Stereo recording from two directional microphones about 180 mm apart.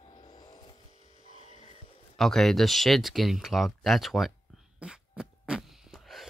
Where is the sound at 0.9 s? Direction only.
35° left (ahead or behind).